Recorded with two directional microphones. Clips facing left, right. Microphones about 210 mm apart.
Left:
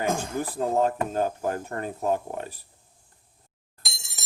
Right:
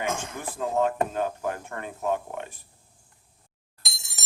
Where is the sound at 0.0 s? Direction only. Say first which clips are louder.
Left 4 dB; 35° left (ahead or behind).